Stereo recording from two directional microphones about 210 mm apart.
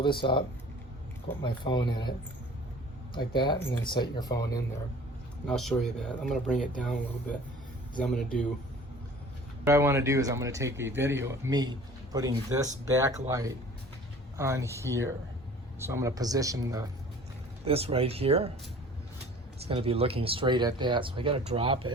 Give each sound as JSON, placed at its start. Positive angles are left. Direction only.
{"t": 0.0, "sound": "speech", "side_deg": 25}
{"t": 3.2, "sound": "speech", "side_deg": 20}
{"t": 5.5, "sound": "speech", "side_deg": 0}
{"t": 8.0, "sound": "speech", "side_deg": 5}
{"t": 9.6, "sound": "speech", "side_deg": -15}
{"t": 17.7, "sound": "speech", "side_deg": -30}
{"t": 19.6, "sound": "speech", "side_deg": -25}